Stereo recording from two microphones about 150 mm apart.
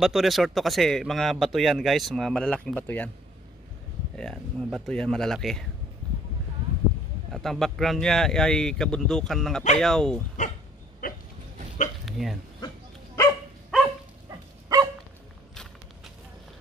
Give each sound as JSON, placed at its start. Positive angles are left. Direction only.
{"t": 0.0, "sound": "a man's voice", "side_deg": 0}
{"t": 4.2, "sound": "a man's voice", "side_deg": 5}
{"t": 7.3, "sound": "a man's voice", "side_deg": 0}
{"t": 11.0, "sound": "a sound", "side_deg": 65}
{"t": 12.1, "sound": "a man's voice", "side_deg": 0}
{"t": 12.5, "sound": "goat", "side_deg": 20}